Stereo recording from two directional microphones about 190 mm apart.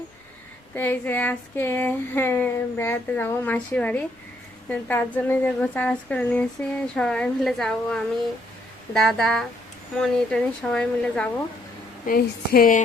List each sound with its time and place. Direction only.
0.8 s speech: 10° left (ahead or behind)
12.0 s speech: 50° left (ahead or behind)